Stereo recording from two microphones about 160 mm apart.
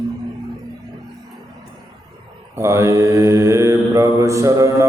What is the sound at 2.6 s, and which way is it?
Mantra, 15° right (ahead or behind).